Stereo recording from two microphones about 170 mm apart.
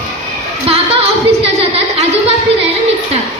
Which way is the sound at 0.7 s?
35° right (ahead or behind).